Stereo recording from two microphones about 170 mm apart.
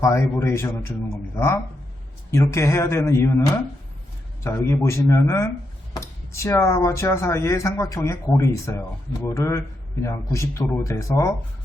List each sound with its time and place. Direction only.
0.0 s speech: 15° left (ahead or behind)
2.3 s speech: 15° left (ahead or behind)
4.4 s speech: 15° left (ahead or behind)